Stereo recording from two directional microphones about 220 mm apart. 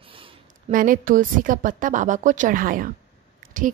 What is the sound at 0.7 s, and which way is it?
A woman's voice, 40° right (ahead or behind).